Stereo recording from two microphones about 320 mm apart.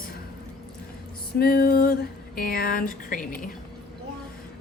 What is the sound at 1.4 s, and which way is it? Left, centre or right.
A woman's voice, left.